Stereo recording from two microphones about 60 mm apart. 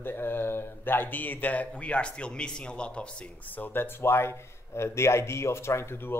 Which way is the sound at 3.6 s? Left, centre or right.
Left.